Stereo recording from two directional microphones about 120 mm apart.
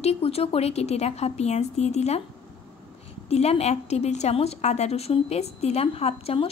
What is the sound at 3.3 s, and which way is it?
A woman's voice, 60° left (ahead or behind).